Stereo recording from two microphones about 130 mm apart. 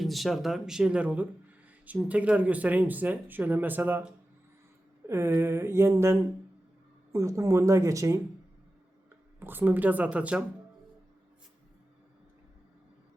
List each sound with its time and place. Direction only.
0.0 s speech: centre (ahead or behind)
5.0 s a sound: 20° right (ahead or behind)
9.4 s speech: 15° right (ahead or behind)